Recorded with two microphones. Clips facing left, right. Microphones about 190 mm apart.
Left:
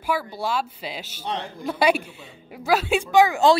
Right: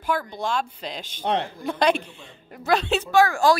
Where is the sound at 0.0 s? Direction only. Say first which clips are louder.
Even; 5° left (ahead or behind).